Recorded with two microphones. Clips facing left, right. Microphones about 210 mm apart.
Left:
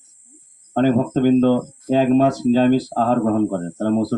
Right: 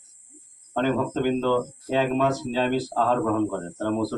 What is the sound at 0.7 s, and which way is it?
Speech, 40° left (ahead or behind).